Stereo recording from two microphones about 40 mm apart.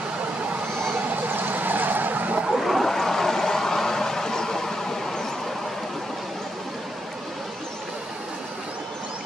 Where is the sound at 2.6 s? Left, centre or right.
Centre.